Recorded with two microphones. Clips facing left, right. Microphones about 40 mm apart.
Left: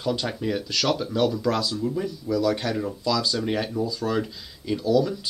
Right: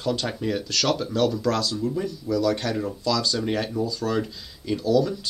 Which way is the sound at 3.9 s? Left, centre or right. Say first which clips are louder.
Even; left.